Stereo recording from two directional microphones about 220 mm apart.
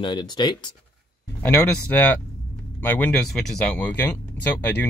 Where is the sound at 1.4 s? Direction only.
5° left (ahead or behind).